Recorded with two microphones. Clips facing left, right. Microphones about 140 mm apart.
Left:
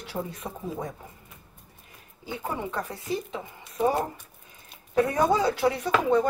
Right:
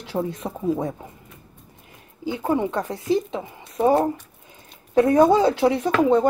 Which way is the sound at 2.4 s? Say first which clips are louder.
Right 9 dB; 25° right (ahead or behind).